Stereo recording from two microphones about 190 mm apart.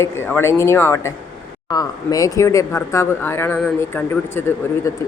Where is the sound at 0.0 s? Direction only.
10° left (ahead or behind).